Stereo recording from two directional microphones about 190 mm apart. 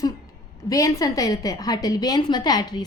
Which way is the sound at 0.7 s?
15° left (ahead or behind).